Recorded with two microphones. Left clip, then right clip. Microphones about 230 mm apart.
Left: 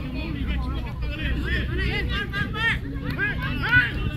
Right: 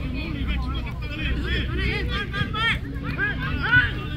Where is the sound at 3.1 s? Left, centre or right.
Left.